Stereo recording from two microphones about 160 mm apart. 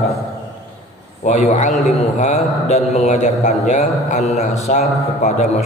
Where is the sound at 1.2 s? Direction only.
45° left (ahead or behind).